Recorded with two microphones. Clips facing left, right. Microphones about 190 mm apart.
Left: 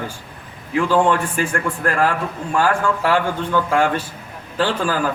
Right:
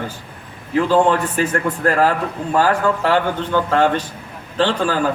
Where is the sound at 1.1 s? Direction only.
35° right (ahead or behind).